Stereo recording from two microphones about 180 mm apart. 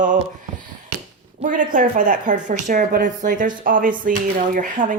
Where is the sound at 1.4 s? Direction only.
45° right (ahead or behind).